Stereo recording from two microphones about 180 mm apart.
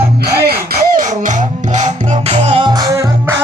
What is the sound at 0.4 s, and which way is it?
Music, 60° right (ahead or behind).